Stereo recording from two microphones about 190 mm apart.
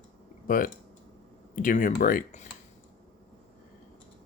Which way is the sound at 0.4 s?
45° left (ahead or behind).